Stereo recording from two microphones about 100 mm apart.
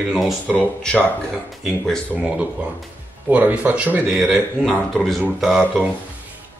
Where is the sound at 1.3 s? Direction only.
Centre (ahead or behind).